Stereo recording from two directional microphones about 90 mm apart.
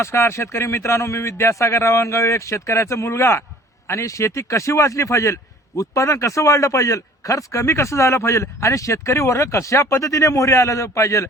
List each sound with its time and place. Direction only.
0.0 s a man's voice: 30° left (ahead or behind)